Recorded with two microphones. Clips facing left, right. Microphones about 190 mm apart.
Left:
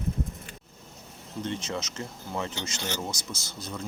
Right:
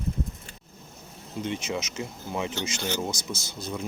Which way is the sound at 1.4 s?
10° right (ahead or behind).